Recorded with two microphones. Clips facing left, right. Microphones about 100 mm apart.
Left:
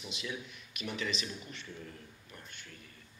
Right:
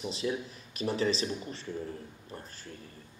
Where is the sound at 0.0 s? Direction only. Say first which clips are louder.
Right 9 dB; 35° right (ahead or behind).